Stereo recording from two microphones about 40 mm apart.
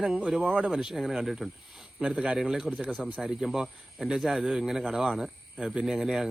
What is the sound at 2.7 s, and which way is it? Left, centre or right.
Speech, right.